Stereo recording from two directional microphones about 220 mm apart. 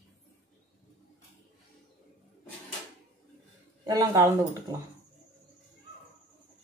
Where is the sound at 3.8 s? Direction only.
15° right (ahead or behind).